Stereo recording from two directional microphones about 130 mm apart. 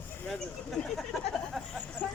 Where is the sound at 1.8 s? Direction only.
15° left (ahead or behind).